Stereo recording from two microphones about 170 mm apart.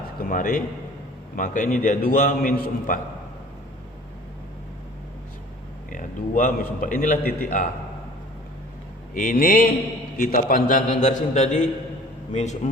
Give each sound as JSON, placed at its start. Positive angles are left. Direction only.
{"t": 0.2, "sound": "a man's voice", "side_deg": 55}
{"t": 5.9, "sound": "a man's voice", "side_deg": 50}
{"t": 9.1, "sound": "a man's voice", "side_deg": 55}